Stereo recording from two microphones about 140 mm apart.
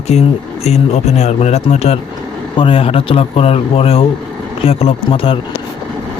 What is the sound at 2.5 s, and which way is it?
Speech, 40° left (ahead or behind).